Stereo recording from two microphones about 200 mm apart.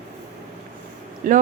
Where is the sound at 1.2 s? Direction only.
40° right (ahead or behind).